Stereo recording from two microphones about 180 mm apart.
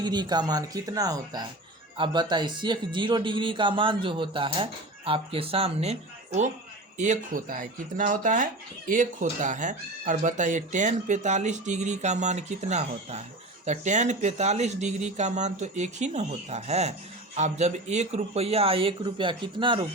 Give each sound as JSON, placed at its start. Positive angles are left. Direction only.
{"t": 0.0, "sound": "speech", "side_deg": -25}